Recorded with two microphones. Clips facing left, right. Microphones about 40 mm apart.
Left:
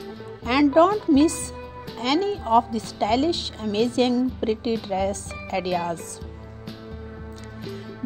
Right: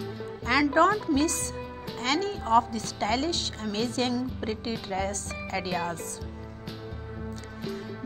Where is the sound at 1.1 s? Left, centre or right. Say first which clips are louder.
Left 7 dB; left.